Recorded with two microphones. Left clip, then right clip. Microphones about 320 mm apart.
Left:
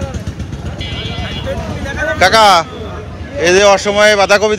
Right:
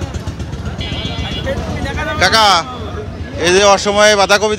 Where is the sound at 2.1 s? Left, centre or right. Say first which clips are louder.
Left 3 dB; centre.